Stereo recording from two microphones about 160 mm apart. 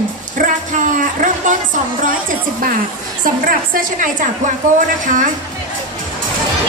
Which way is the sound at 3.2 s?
60° right (ahead or behind).